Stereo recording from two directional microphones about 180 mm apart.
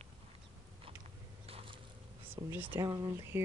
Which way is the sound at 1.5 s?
30° right (ahead or behind).